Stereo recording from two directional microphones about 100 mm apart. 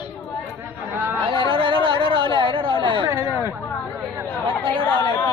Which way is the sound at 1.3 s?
60° right (ahead or behind).